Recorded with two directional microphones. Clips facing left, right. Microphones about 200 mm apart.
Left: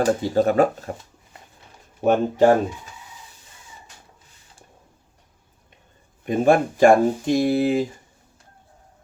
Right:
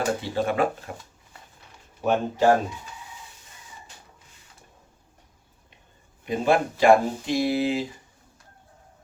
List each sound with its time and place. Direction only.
0.0 s speech: 40° left (ahead or behind)
2.0 s speech: 55° left (ahead or behind)
6.2 s speech: 50° left (ahead or behind)